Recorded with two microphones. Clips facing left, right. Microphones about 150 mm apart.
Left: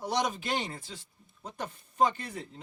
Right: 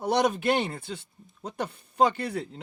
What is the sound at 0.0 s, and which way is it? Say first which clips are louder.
Speech: right 7 dB; 60° right (ahead or behind).